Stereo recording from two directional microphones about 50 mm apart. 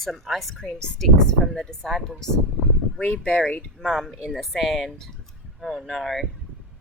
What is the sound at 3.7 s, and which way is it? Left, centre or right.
Speech, centre.